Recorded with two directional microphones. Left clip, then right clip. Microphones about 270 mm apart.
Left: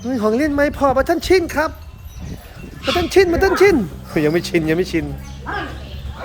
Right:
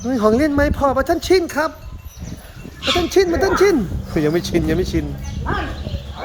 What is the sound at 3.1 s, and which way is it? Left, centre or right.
Speech, centre.